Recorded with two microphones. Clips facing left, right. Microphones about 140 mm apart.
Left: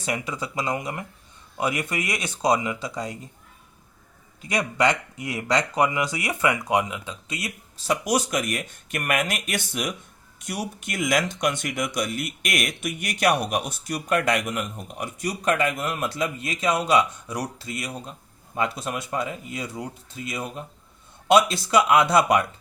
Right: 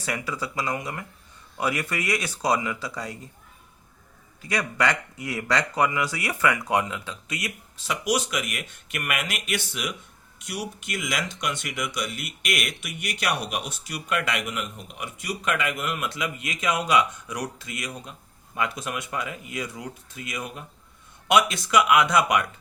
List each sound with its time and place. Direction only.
0.0 s speech: 20° left (ahead or behind)
4.4 s speech: 20° left (ahead or behind)
7.8 s speech: 40° left (ahead or behind)